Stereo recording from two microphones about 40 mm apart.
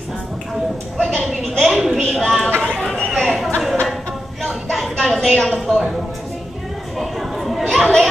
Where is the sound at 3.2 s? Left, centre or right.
Centre.